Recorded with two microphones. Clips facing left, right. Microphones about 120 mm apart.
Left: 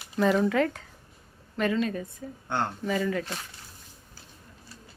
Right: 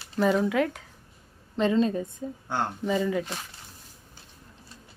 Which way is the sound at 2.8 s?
15° right (ahead or behind).